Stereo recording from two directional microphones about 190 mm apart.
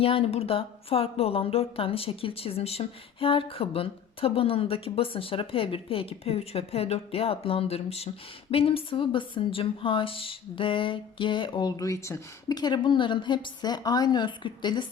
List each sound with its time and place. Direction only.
0.0 s speech: 30° left (ahead or behind)